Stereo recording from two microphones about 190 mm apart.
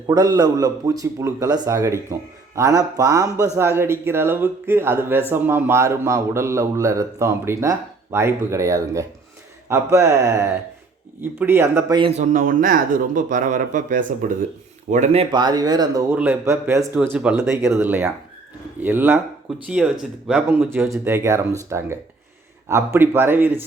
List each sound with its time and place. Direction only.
0.1 s a man's voice: 20° right (ahead or behind)
11.9 s a man's voice: 25° right (ahead or behind)
12.2 s a man's voice: 45° right (ahead or behind); by 16.0 s 20° right (ahead or behind)
16.1 s a man's voice: 10° right (ahead or behind)